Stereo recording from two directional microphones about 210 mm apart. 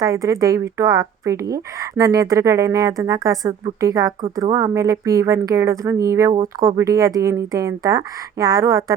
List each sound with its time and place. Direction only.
0.0 s a woman's voice: 15° right (ahead or behind)